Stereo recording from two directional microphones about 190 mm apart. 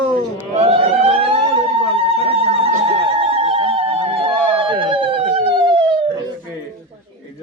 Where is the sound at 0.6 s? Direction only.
30° right (ahead or behind).